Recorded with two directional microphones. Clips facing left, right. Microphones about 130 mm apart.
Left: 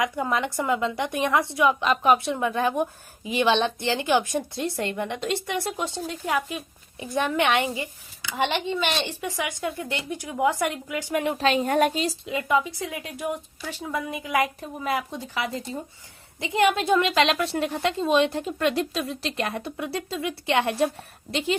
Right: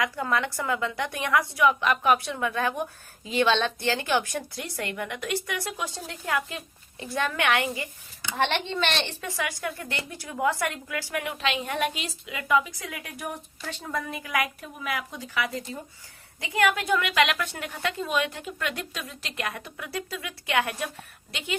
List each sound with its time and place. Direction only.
0.0 s speech: 20° left (ahead or behind)
8.4 s speech: 10° left (ahead or behind)
14.4 s speech: 35° left (ahead or behind)